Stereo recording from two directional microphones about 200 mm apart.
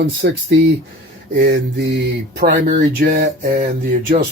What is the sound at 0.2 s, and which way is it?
Speech, 50° right (ahead or behind).